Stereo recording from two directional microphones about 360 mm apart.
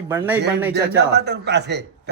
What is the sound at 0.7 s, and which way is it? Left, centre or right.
A man's voice, right.